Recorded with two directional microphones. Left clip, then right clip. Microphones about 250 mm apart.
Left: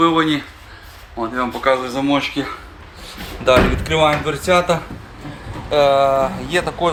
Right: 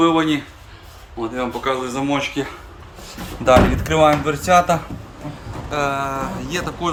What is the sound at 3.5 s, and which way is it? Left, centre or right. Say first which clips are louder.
A man's voice: even; centre.